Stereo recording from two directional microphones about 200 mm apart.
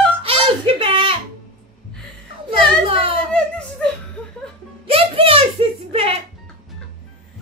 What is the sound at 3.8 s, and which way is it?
Chuckle, 5° left (ahead or behind).